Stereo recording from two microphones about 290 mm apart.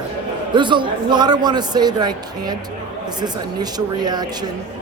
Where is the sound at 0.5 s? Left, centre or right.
Centre.